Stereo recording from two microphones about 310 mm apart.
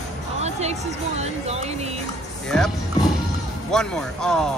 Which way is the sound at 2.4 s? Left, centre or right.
Centre.